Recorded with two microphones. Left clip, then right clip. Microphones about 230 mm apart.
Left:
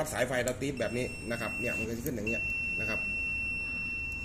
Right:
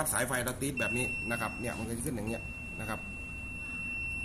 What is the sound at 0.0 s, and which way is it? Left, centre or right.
Speech, centre.